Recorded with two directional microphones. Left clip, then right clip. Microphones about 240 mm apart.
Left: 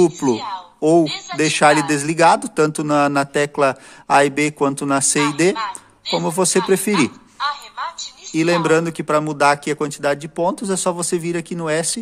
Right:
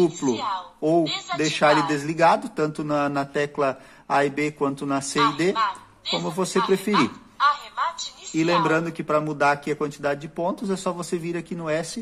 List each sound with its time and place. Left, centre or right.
0.3 s speech: centre
0.7 s a woman's voice: left
1.0 s speech: centre
1.4 s speech: left
5.1 s speech: centre
5.6 s a sound: centre
6.2 s speech: left
6.9 s a sound: centre
8.6 s speech: left